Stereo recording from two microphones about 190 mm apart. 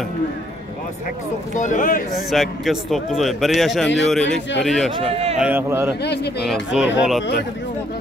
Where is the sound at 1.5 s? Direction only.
40° left (ahead or behind).